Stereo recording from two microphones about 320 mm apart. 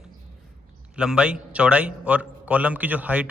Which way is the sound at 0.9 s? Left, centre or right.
Centre.